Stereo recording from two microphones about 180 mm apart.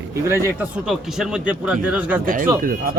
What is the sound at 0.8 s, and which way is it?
Speech, 5° right (ahead or behind).